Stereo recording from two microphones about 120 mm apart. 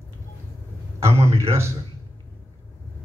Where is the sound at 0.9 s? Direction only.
25° right (ahead or behind).